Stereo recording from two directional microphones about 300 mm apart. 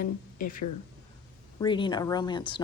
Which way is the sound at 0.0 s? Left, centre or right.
Left.